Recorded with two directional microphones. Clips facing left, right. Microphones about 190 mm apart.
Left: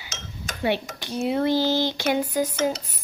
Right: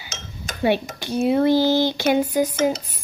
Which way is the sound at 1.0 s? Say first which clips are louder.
Right 5 dB; 25° right (ahead or behind).